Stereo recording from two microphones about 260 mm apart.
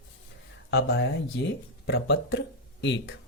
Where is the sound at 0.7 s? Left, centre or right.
Left.